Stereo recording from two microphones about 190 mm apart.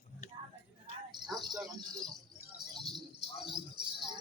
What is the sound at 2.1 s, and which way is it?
Keys jangling, centre (ahead or behind).